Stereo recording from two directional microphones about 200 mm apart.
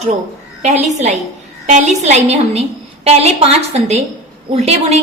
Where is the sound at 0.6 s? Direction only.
35° right (ahead or behind).